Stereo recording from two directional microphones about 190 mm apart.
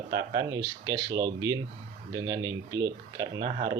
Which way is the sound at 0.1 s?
20° right (ahead or behind).